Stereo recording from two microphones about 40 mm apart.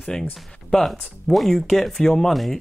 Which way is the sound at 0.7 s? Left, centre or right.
Centre.